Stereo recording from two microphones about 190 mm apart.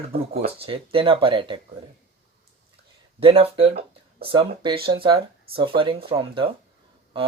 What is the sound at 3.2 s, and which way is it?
Speech, 30° right (ahead or behind).